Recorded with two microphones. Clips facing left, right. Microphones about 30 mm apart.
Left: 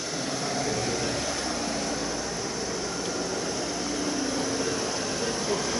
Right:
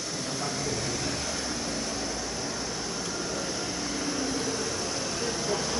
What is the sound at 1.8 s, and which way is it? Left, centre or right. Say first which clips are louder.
Air conditioning: left 3 dB; centre.